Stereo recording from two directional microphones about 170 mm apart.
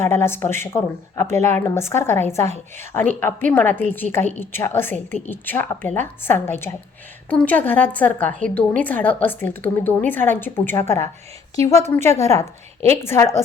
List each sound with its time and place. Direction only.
0.0 s a woman's voice: 15° left (ahead or behind)